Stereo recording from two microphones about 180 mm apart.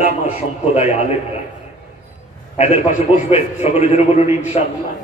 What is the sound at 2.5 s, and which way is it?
A man's voice, 35° left (ahead or behind).